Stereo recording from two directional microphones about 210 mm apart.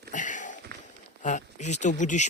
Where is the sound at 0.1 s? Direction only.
35° left (ahead or behind).